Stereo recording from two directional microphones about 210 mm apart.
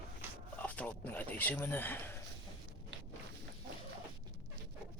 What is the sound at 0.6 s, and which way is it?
Speech, 5° left (ahead or behind).